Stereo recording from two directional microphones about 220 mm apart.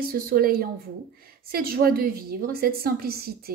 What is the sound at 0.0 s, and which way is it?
A woman's voice, 45° right (ahead or behind).